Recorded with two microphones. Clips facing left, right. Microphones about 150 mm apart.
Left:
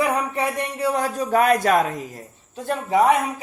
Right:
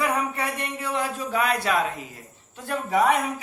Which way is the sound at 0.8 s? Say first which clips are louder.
Left 6 dB; 40° left (ahead or behind).